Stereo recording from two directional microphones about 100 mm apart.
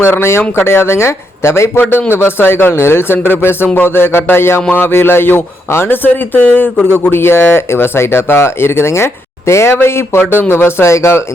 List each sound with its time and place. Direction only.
0.0 s speech: 25° left (ahead or behind)